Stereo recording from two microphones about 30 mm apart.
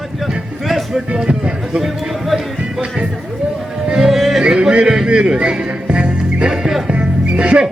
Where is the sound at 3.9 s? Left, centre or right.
Centre.